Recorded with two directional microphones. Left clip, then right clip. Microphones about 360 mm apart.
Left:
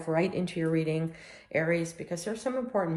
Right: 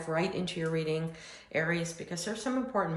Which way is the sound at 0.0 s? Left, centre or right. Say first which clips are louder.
Left 3 dB; centre.